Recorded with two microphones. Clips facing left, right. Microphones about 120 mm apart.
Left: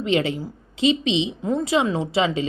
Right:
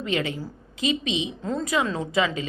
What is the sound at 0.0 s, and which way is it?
A woman's voice, 30° left (ahead or behind).